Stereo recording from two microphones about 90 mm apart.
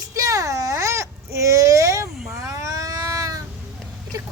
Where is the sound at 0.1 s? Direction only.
35° right (ahead or behind).